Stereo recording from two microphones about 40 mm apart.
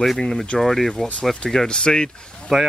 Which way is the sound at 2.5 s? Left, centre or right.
Centre.